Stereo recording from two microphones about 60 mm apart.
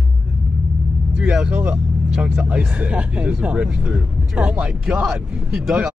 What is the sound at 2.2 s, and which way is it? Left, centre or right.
Speech, right.